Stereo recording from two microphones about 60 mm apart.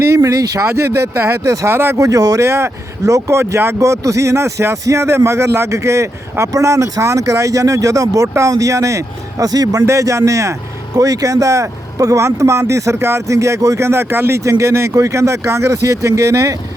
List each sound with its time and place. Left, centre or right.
0.2 s a man's voice: right
0.7 s speech: right
2.0 s a man's voice: right
2.4 s speech: right
3.8 s a man's voice: right
9.8 s speech: right
10.9 s a man's voice: right
12.2 s speech: right
13.8 s speech: right
14.4 s speech: right